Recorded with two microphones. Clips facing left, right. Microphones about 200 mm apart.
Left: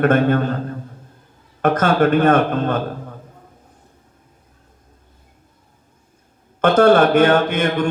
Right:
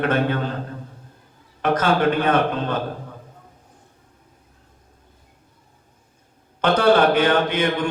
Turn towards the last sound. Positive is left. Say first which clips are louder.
# left 4 dB
turn(degrees=45)  # may be behind; listen again after turning